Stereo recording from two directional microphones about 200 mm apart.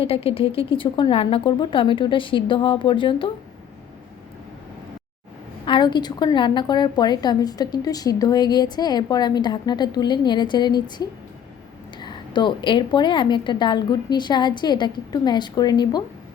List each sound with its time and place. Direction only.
0.0 s a woman's voice: 30° left (ahead or behind)
5.6 s a woman's voice: 25° left (ahead or behind)